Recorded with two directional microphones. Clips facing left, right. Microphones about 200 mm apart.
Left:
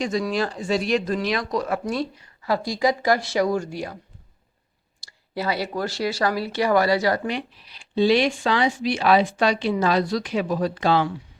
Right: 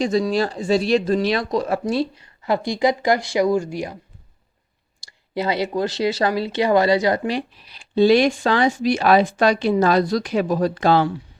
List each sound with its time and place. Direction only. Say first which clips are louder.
0.0 s speech: right 4 dB; 30° right (ahead or behind); by 3.9 s 15° right (ahead or behind)
5.3 s speech: right 4 dB; 20° right (ahead or behind)
7.3 s speech: right 4 dB; 40° right (ahead or behind)